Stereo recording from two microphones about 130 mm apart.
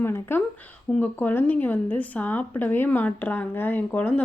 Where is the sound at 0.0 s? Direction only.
15° left (ahead or behind).